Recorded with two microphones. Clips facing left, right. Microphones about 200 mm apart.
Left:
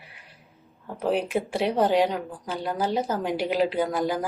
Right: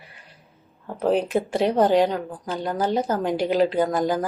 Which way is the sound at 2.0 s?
5° left (ahead or behind).